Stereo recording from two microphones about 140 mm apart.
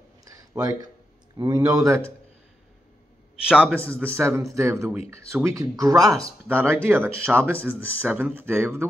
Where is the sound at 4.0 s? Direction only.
20° right (ahead or behind).